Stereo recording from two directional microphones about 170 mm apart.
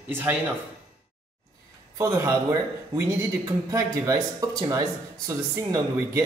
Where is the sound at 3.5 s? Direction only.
20° right (ahead or behind).